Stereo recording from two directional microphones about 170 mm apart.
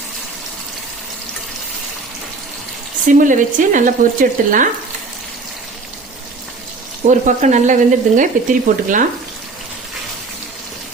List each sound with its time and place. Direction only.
3.1 s speech: 50° right (ahead or behind)
7.1 s speech: 45° right (ahead or behind)